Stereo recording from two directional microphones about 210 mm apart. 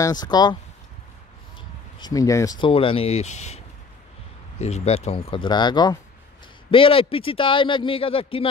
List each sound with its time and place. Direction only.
0.0 s a man's voice: 20° left (ahead or behind)
2.0 s a man's voice: 20° left (ahead or behind)